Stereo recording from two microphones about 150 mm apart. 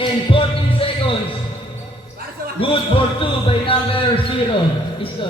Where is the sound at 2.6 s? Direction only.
35° left (ahead or behind).